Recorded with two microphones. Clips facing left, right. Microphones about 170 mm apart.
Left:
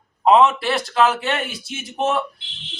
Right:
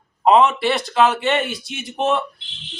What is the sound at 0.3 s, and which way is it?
A man's voice, centre (ahead or behind).